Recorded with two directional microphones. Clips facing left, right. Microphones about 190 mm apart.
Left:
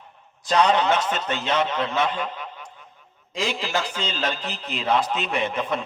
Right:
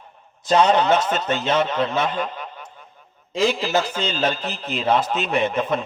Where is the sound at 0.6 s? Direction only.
40° right (ahead or behind).